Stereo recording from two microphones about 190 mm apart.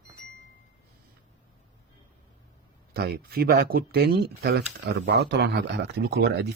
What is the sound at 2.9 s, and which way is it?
Speech, 55° right (ahead or behind).